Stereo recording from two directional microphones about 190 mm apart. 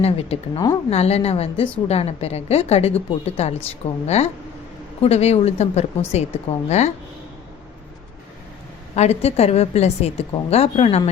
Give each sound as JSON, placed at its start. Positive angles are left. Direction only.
{"t": 0.0, "sound": "a woman's voice", "side_deg": 30}
{"t": 9.0, "sound": "a woman's voice", "side_deg": 35}